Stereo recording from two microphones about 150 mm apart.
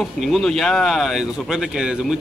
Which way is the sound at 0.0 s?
Centre (ahead or behind).